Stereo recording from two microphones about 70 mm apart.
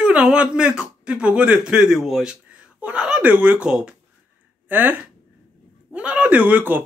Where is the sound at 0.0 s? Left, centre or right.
Centre.